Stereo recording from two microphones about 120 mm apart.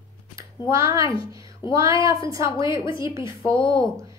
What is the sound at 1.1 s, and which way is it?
Speech, 45° left (ahead or behind).